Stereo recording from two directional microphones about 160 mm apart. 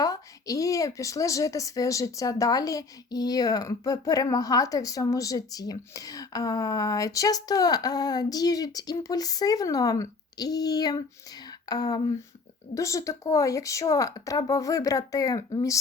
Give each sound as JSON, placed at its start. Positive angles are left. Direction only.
{"t": 0.0, "sound": "speech", "side_deg": 20}